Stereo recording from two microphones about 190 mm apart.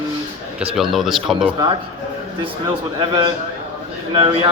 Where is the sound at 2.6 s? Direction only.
25° right (ahead or behind).